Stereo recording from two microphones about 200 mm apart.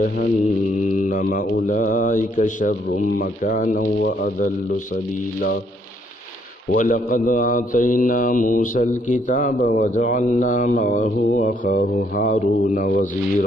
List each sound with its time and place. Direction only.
0.9 s mantra: 40° left (ahead or behind)
6.7 s mantra: 45° left (ahead or behind)